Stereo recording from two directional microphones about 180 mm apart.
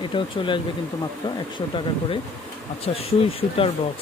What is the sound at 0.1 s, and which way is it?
Speech, 25° left (ahead or behind).